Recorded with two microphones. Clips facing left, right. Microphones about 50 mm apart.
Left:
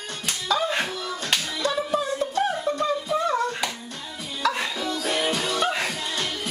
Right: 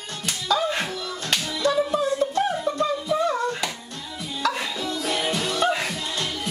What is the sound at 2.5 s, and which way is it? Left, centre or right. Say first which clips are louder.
Music: right 1 dB; centre.